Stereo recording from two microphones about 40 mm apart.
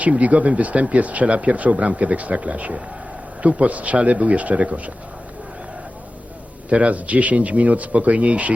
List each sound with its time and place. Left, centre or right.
0.0 s speech: right
6.7 s speech: right